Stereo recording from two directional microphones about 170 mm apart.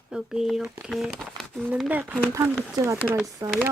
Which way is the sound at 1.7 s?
10° right (ahead or behind).